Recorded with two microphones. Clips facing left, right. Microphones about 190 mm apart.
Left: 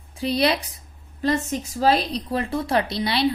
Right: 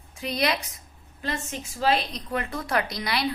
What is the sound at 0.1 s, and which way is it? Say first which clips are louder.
A woman's voice: left 5 dB; 30° left (ahead or behind).